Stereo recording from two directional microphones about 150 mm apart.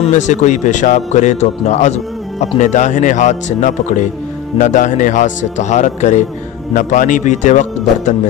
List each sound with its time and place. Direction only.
0.0 s a man's voice: 55° left (ahead or behind)